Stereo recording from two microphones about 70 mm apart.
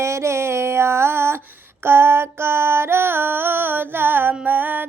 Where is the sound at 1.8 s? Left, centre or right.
Right.